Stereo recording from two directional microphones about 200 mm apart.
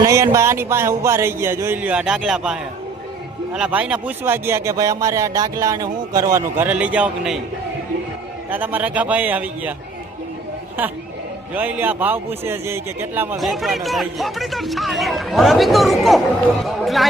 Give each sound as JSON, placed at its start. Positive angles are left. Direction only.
{"t": 0.0, "sound": "speech", "side_deg": -15}
{"t": 8.4, "sound": "speech", "side_deg": -10}
{"t": 11.5, "sound": "speech", "side_deg": -10}
{"t": 13.4, "sound": "speech", "side_deg": 0}